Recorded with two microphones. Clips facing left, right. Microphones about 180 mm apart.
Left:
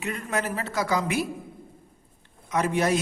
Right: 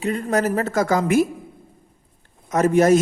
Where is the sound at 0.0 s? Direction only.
30° right (ahead or behind).